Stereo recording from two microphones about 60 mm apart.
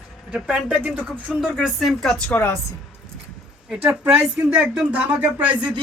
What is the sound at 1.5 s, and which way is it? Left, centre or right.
Speech, centre.